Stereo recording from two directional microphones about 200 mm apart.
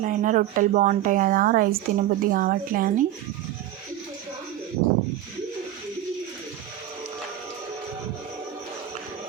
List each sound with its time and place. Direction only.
0.0 s speech: 40° right (ahead or behind)